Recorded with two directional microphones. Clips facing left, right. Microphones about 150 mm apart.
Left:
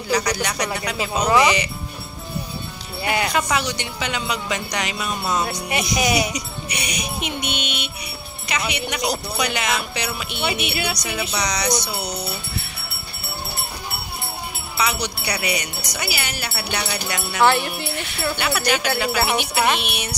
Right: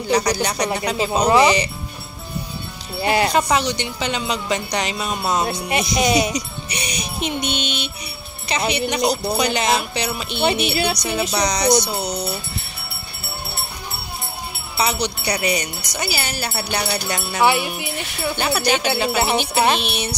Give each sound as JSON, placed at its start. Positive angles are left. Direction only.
{"t": 0.1, "sound": "speech", "side_deg": -30}
{"t": 3.0, "sound": "speech", "side_deg": -30}
{"t": 14.8, "sound": "speech", "side_deg": -30}
{"t": 17.4, "sound": "speech", "side_deg": -15}
{"t": 18.4, "sound": "speech", "side_deg": -30}